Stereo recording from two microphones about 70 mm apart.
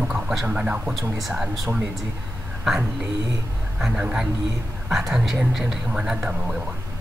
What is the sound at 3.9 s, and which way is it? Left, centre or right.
Speech, centre.